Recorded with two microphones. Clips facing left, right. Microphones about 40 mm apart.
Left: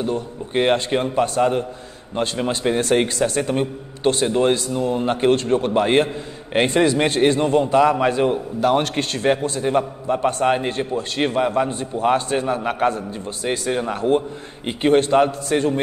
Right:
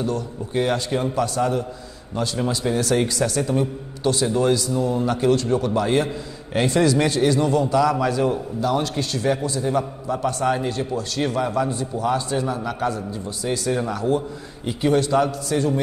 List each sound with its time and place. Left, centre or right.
0.6 s a man's voice: left